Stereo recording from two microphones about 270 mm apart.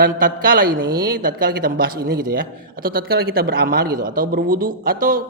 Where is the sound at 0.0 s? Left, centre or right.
Right.